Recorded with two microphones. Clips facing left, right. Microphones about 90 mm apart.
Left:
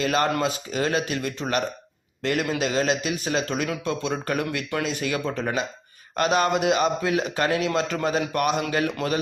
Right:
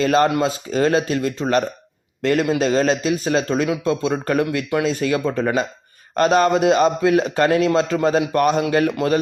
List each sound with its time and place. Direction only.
0.0 s a man's voice: 35° right (ahead or behind)